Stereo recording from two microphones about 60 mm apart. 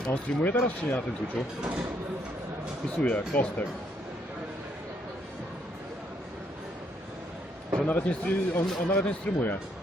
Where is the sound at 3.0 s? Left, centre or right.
Left.